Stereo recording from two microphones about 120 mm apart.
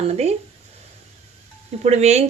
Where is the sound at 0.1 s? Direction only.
60° right (ahead or behind).